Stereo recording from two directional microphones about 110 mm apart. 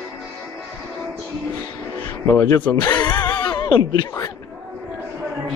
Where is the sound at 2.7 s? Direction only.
40° left (ahead or behind).